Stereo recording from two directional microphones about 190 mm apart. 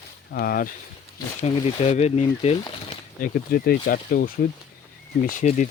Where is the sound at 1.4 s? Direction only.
35° left (ahead or behind).